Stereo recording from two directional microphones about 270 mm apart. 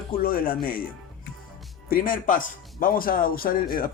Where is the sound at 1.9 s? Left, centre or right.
Left.